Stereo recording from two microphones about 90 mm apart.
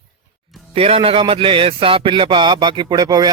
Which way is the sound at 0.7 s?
90° right.